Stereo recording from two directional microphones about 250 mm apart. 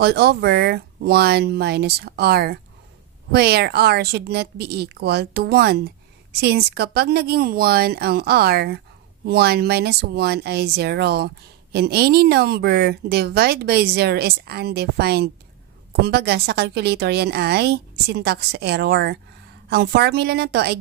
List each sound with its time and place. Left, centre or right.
0.0 s speech: right